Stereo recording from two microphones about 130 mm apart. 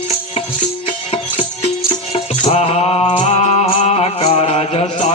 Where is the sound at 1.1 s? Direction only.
55° left (ahead or behind).